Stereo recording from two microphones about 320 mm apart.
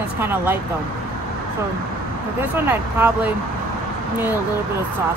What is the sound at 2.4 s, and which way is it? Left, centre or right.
Speech, centre.